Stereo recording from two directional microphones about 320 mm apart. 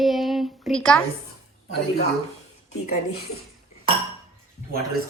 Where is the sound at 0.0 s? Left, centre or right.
Centre.